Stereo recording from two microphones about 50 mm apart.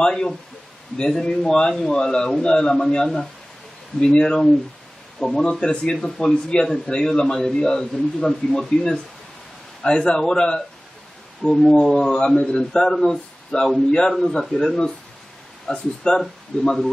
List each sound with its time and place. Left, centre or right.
0.0 s speech: centre
14.1 s speech: centre